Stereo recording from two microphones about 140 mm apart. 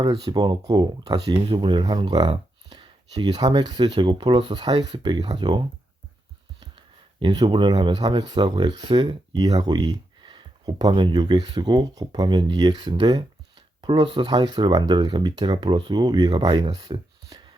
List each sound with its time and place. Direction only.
0.0 s speech: 30° right (ahead or behind)
7.2 s speech: 35° right (ahead or behind)